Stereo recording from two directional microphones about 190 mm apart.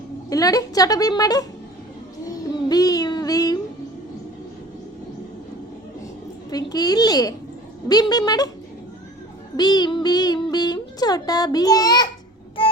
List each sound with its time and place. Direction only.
0.3 s child singing: 20° left (ahead or behind)
6.5 s child singing: 20° left (ahead or behind)
9.6 s child singing: 20° left (ahead or behind)